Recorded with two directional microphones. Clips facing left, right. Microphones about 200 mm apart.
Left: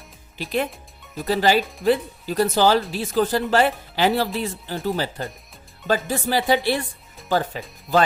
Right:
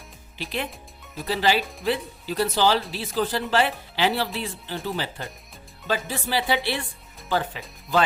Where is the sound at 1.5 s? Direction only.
Centre (ahead or behind).